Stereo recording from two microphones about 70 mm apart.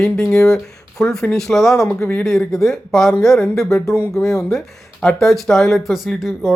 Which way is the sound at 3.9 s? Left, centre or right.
Left.